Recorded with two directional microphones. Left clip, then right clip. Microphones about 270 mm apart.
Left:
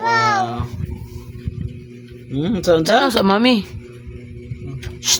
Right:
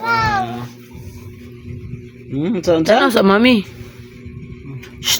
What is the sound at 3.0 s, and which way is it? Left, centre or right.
Speech, centre.